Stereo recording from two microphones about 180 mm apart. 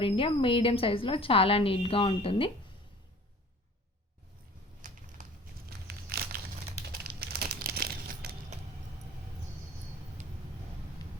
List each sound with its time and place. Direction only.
0.0 s a woman's voice: 30° left (ahead or behind)
4.8 s a sound: 45° right (ahead or behind)
5.9 s crumpling: 55° right (ahead or behind)